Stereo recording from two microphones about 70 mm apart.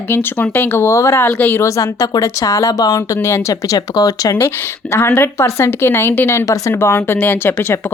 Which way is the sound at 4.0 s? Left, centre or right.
Left.